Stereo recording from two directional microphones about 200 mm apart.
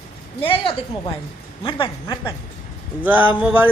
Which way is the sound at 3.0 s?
10° right (ahead or behind).